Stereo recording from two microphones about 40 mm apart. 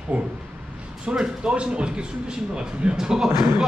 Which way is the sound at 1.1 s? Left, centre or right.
Right.